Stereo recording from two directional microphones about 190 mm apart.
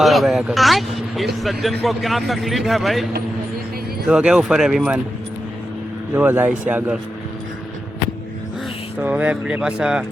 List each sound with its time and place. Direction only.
0.0 s speech: centre (ahead or behind)
6.1 s speech: 10° right (ahead or behind)
9.0 s speech: 10° right (ahead or behind)